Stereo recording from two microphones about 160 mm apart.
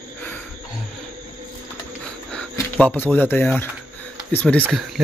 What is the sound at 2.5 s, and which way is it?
Speech, 10° left (ahead or behind).